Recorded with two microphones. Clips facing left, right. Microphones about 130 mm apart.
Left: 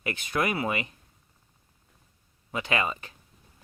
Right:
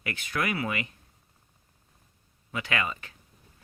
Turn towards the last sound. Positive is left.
turn(degrees=25)  # may be behind; listen again after turning